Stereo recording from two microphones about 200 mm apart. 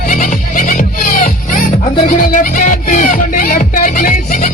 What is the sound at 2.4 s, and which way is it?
Music, 40° left (ahead or behind).